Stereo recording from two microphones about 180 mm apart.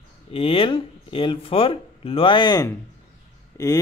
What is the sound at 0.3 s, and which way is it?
Speech, 30° left (ahead or behind).